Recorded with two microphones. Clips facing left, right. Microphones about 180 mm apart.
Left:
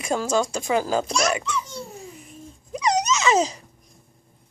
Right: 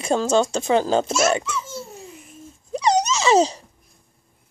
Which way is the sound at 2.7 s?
30° right (ahead or behind).